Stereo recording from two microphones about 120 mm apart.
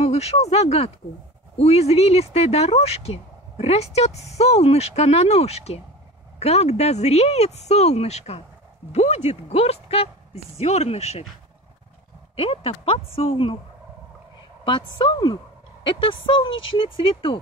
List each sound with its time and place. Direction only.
0.0 s speech: 60° left (ahead or behind)
12.4 s speech: 50° left (ahead or behind)
14.6 s a woman's voice: 45° left (ahead or behind)